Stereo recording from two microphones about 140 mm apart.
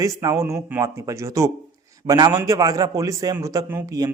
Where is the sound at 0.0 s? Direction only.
25° right (ahead or behind).